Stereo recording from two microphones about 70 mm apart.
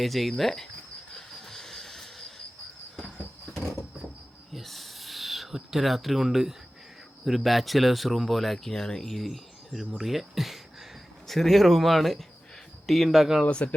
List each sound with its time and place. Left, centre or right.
0.0 s speech: centre
1.1 s train: centre
4.5 s a sound: centre
7.3 s speech: centre
13.4 s speech: centre